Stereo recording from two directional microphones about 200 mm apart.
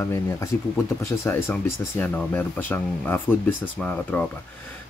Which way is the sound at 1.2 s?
10° left (ahead or behind).